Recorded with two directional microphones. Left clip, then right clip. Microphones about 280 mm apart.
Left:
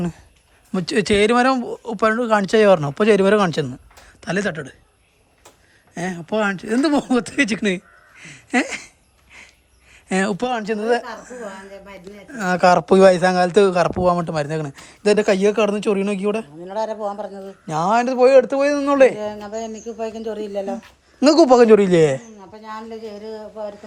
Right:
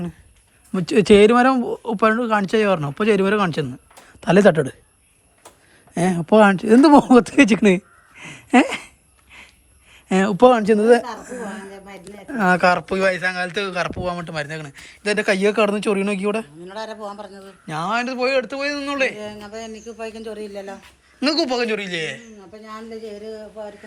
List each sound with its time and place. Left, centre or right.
0.7 s speech: centre
5.9 s speech: centre
9.9 s speech: centre
10.5 s speech: centre
11.9 s speech: centre
16.6 s a man's voice: left
17.7 s a man's voice: centre
22.5 s speech: centre
22.9 s a sound: left